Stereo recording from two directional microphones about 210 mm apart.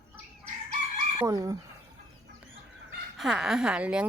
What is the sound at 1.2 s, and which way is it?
Speech, 15° right (ahead or behind).